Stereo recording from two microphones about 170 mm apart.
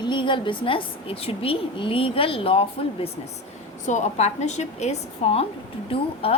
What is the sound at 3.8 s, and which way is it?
A woman's voice, 45° left (ahead or behind).